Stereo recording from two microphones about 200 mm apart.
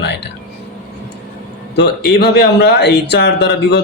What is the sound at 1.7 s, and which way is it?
Speech, 55° left (ahead or behind).